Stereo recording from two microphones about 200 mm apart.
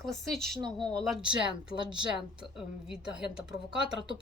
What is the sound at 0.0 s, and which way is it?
Speech, centre (ahead or behind).